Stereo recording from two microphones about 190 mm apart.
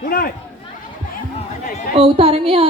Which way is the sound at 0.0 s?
50° left (ahead or behind).